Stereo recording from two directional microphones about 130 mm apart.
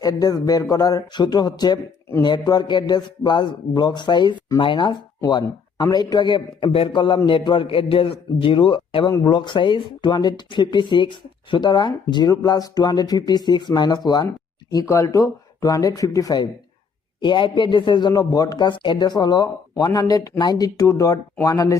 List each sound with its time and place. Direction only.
0.0 s a man's voice: 30° left (ahead or behind)